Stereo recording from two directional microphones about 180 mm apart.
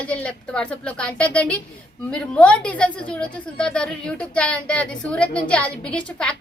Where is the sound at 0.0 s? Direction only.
5° left (ahead or behind).